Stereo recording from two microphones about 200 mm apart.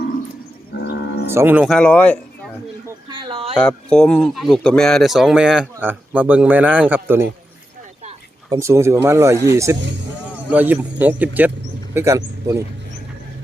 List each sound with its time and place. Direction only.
0.7 s livestock: 55° left (ahead or behind)
1.3 s a man's voice: 10° right (ahead or behind)
1.7 s speech: 5° left (ahead or behind)
3.1 s a sound: 25° right (ahead or behind)
3.5 s a man's voice: 5° left (ahead or behind); by 7.3 s 10° right (ahead or behind)
8.4 s a man's voice: 15° right (ahead or behind)